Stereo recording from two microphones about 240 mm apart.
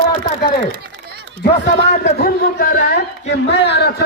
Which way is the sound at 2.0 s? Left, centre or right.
Left.